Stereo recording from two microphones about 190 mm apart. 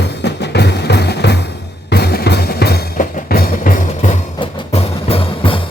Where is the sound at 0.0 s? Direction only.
65° left (ahead or behind); by 4.2 s 40° left (ahead or behind).